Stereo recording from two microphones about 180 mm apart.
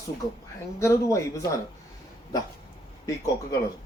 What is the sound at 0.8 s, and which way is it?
Speech, 15° left (ahead or behind).